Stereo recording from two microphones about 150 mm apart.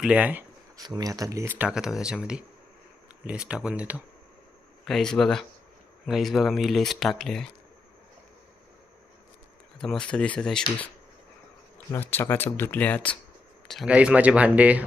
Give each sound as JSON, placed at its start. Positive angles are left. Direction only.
{"t": 0.0, "sound": "speech", "side_deg": -10}
{"t": 0.8, "sound": "speech", "side_deg": -25}
{"t": 4.9, "sound": "speech", "side_deg": 0}
{"t": 9.8, "sound": "speech", "side_deg": 5}
{"t": 11.9, "sound": "speech", "side_deg": 15}
{"t": 13.7, "sound": "speech", "side_deg": -5}